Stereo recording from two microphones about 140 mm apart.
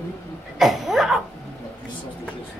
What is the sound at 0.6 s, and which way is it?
Cough, centre (ahead or behind).